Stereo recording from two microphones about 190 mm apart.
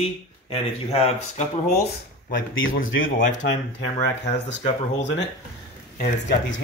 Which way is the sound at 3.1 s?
45° left (ahead or behind).